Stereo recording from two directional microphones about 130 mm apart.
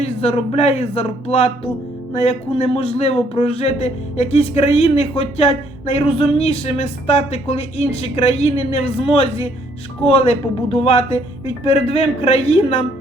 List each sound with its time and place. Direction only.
0.0 s a man's voice: 50° left (ahead or behind)